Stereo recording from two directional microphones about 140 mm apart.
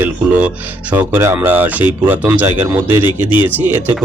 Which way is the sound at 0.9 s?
20° right (ahead or behind).